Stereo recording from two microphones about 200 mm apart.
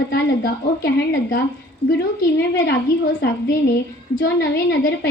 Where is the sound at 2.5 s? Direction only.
60° left (ahead or behind).